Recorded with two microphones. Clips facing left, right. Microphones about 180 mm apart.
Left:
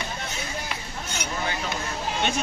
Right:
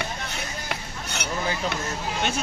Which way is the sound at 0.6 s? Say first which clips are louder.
Right 1 dB; 65° right (ahead or behind).